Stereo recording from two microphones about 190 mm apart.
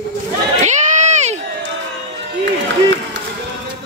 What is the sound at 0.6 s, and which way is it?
Crowd, 40° right (ahead or behind).